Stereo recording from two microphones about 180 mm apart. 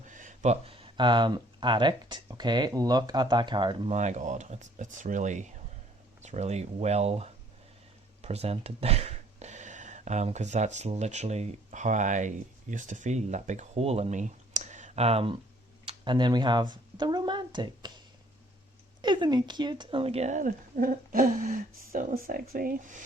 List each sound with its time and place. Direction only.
0.1 s speech: 45° right (ahead or behind); by 3.9 s 25° right (ahead or behind)
3.9 s speech: 40° right (ahead or behind); by 18.0 s 25° right (ahead or behind)
19.0 s speech: 25° right (ahead or behind); by 23.0 s 45° right (ahead or behind)